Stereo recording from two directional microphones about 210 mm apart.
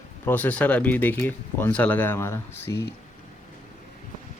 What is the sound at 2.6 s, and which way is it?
Speech, 50° left (ahead or behind).